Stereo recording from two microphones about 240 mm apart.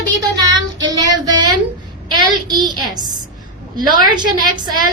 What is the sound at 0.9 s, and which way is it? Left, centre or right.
A woman's voice, centre.